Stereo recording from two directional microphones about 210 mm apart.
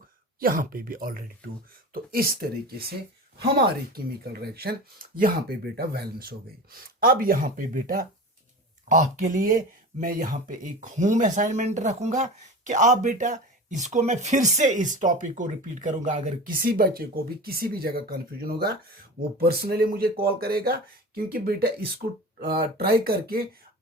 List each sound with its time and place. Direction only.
0.3 s speech: 40° right (ahead or behind)
3.9 s speech: 45° right (ahead or behind)